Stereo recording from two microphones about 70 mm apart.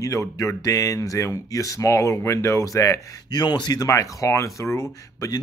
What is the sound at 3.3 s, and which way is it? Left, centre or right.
Speech, left.